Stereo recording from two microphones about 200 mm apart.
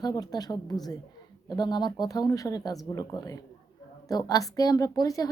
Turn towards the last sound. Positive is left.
turn(degrees=20)  # may be behind; listen again after turning